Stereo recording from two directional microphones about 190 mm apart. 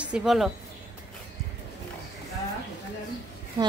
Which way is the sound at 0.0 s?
5° right (ahead or behind).